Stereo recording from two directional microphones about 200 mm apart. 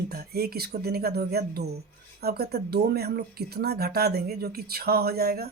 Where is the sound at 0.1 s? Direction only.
50° right (ahead or behind).